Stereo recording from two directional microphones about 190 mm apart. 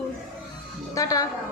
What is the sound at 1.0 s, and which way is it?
Speech, 20° left (ahead or behind).